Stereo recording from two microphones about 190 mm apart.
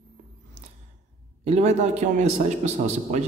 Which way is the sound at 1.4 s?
35° right (ahead or behind).